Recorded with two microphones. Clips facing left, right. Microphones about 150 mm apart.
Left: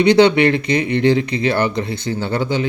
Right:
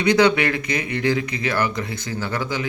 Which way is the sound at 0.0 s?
30° left (ahead or behind).